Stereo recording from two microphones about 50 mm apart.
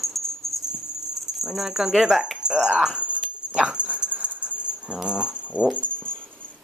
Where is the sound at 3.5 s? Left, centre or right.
Right.